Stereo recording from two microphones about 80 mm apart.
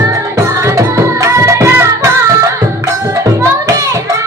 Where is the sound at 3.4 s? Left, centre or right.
Right.